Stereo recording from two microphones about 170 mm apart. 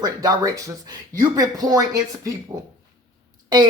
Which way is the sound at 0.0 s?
20° right (ahead or behind).